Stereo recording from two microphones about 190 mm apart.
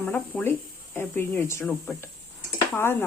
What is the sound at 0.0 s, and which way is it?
Speech, 5° left (ahead or behind).